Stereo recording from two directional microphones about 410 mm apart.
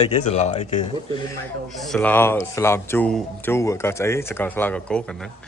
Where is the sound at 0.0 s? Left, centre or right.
Centre.